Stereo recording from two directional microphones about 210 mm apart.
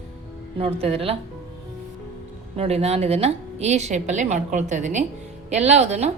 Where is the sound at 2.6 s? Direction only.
30° right (ahead or behind).